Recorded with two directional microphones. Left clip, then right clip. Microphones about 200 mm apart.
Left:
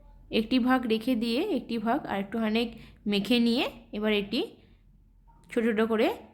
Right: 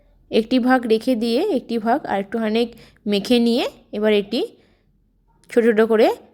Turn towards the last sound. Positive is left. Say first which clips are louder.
# right 11 dB
turn(degrees=-25)  # may be behind; listen again after turning